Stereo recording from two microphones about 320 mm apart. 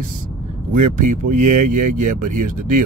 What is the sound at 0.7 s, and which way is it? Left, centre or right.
Speech, right.